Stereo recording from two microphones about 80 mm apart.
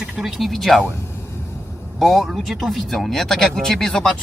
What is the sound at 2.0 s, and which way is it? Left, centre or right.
A man's voice, centre.